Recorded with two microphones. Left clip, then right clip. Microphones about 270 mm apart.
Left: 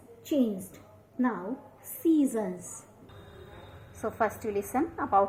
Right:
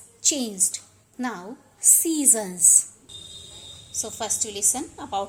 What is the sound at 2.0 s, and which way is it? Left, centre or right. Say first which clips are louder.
Speech: right 2 dB; right.